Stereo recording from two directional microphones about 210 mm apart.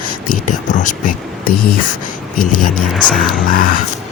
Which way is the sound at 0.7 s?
35° left (ahead or behind).